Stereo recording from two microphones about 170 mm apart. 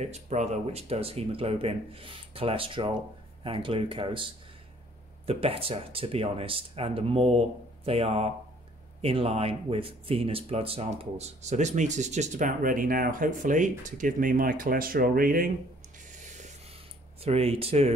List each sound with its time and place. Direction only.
0.0 s speech: 40° right (ahead or behind)
16.1 s spray: 45° right (ahead or behind)
17.2 s speech: 35° right (ahead or behind)